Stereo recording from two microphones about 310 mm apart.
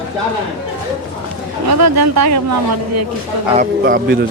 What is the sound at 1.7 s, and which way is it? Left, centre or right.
Speech, right.